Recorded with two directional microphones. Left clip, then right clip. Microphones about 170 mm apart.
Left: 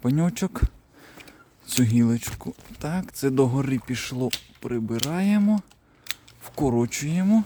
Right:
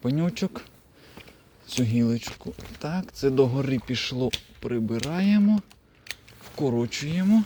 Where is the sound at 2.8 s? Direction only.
40° left (ahead or behind).